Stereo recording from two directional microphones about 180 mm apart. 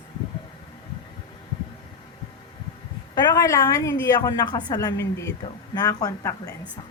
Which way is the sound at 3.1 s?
20° left (ahead or behind).